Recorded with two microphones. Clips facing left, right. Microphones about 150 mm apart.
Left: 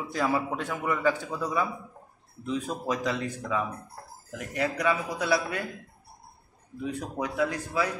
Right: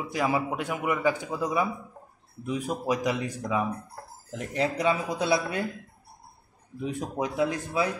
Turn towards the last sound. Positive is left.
turn(degrees=-20)  # may be behind; listen again after turning